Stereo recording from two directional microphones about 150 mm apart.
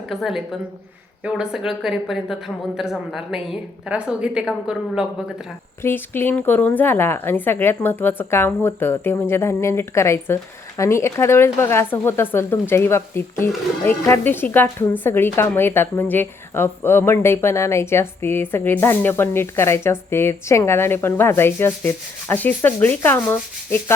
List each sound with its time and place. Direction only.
0.1 s a woman's voice: centre (ahead or behind)
5.8 s a woman's voice: 15° left (ahead or behind)